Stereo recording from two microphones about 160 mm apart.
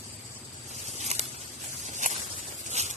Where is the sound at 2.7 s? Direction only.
45° right (ahead or behind).